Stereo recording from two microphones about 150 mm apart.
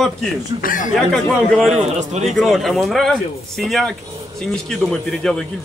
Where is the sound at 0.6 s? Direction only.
65° left (ahead or behind).